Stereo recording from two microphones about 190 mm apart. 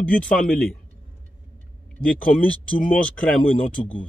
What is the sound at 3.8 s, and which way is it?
Speech, 40° left (ahead or behind).